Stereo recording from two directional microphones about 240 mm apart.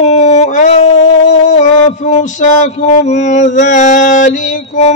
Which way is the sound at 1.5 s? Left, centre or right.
Left.